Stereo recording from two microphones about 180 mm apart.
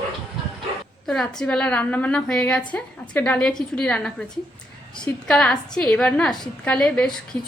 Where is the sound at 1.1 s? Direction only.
5° left (ahead or behind).